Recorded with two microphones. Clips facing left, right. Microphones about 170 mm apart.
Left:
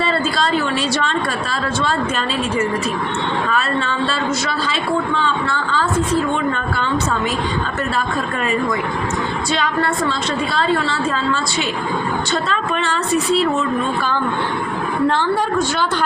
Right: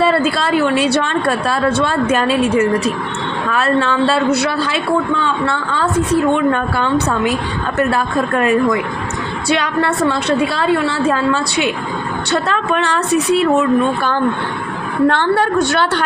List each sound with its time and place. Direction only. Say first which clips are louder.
0.8 s a woman's voice: right 4 dB; 60° right (ahead or behind)
3.5 s a woman's voice: right 5 dB; 70° right (ahead or behind)
9.5 s a woman's voice: right 5 dB; 65° right (ahead or behind)